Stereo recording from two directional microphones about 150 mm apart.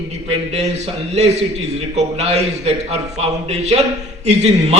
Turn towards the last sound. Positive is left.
turn(degrees=-45)  # may be behind; listen again after turning